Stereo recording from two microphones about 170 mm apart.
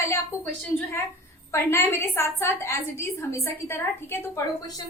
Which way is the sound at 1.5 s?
15° left (ahead or behind).